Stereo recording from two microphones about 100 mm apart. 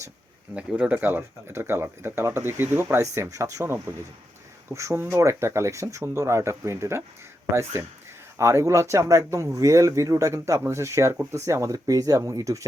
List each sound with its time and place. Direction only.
0.5 s speech: 15° right (ahead or behind); by 12.6 s 35° right (ahead or behind)